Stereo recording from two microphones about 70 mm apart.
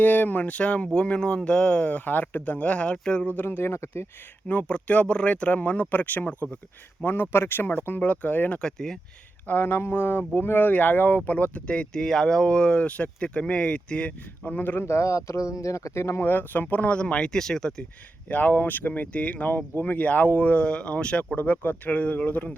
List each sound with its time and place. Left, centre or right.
0.0 s speech: left
3.3 s speech: left
4.4 s speech: left
8.6 s speech: centre
9.5 s speech: left
16.3 s speech: left; by 17.8 s centre
18.3 s speech: left